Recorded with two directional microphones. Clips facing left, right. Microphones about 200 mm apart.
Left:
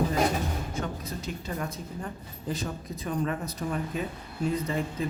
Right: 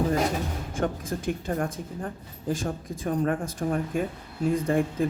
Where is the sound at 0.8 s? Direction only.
50° right (ahead or behind).